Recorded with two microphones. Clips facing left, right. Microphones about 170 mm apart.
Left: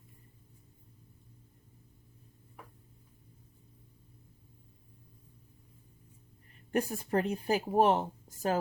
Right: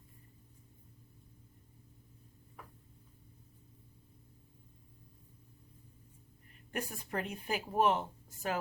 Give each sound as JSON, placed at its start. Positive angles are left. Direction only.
{"t": 6.7, "sound": "speech", "side_deg": 35}